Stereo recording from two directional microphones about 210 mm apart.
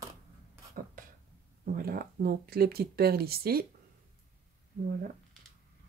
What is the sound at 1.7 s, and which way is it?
Speech, 45° right (ahead or behind).